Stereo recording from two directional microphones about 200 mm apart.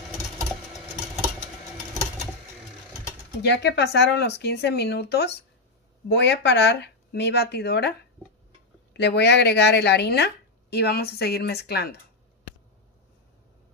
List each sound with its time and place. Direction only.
3.4 s speech: 55° left (ahead or behind)
8.9 s speech: 60° left (ahead or behind)